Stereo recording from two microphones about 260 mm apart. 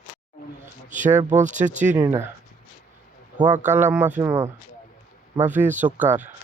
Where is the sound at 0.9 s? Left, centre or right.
Right.